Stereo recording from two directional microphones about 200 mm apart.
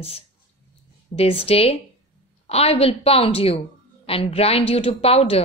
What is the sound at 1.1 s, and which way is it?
A woman's voice, 30° left (ahead or behind).